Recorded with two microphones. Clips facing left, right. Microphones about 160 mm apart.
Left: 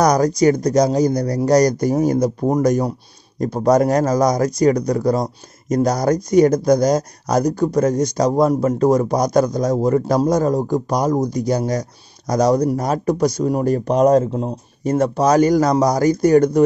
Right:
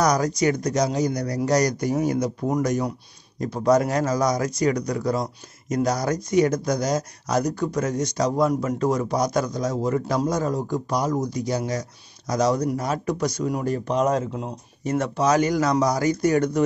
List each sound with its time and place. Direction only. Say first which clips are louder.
0.0 s speech: left 6 dB; 40° left (ahead or behind)